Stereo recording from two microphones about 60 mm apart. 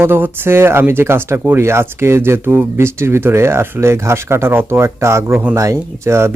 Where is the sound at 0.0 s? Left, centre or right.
Right.